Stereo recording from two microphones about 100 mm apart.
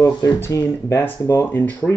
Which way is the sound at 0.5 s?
30° left (ahead or behind).